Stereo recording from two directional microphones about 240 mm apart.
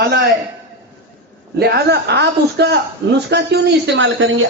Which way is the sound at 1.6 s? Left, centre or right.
Right.